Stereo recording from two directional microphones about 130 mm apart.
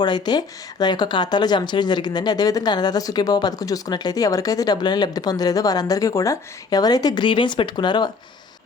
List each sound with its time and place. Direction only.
0.0 s speech: 35° left (ahead or behind)